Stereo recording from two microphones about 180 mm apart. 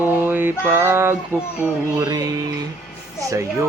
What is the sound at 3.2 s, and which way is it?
Music, 20° right (ahead or behind).